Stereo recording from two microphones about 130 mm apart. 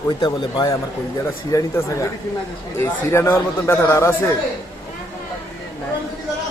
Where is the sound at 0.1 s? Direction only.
35° left (ahead or behind).